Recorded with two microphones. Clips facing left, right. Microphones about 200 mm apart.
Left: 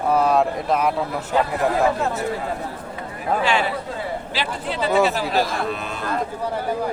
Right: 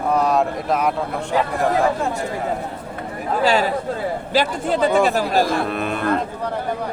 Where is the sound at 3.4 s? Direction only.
40° right (ahead or behind); by 6.2 s 60° right (ahead or behind).